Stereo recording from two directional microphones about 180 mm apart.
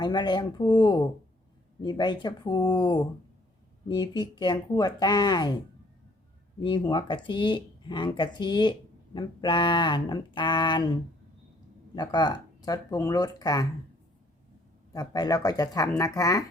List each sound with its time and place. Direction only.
0.0 s speech: 25° left (ahead or behind)
6.6 s speech: 25° left (ahead or behind)
14.9 s speech: 20° left (ahead or behind)